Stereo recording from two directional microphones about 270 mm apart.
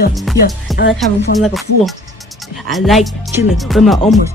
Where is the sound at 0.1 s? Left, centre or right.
Centre.